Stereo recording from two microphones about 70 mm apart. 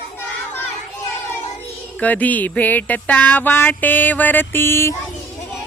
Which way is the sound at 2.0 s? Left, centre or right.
Left.